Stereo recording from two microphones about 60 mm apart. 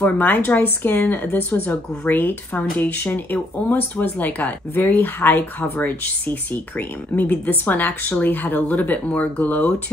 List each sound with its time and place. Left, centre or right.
0.0 s speech: left